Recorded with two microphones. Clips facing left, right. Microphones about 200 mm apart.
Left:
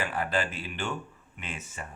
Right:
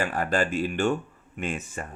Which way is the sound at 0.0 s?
45° right (ahead or behind).